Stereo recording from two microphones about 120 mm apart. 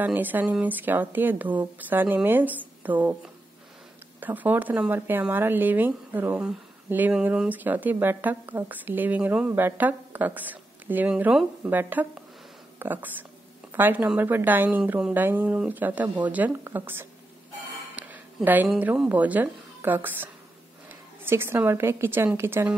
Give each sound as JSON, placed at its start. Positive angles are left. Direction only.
{"t": 0.0, "sound": "speech", "side_deg": -15}
{"t": 17.9, "sound": "music", "side_deg": -15}
{"t": 19.0, "sound": "a woman's voice", "side_deg": -15}